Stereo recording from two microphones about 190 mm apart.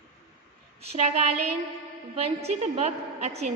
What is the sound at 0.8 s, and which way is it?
A woman's voice, 35° right (ahead or behind).